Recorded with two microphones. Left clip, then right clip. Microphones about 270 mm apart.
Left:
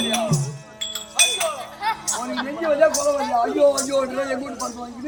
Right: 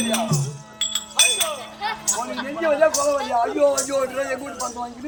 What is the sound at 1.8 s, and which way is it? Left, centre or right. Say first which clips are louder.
Music: left 1 dB; centre.